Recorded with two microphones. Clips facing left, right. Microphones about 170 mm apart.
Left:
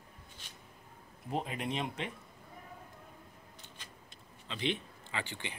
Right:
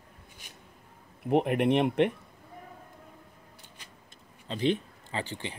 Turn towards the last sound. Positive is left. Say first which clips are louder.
# right 5 dB
turn(degrees=-35)  # may be behind; listen again after turning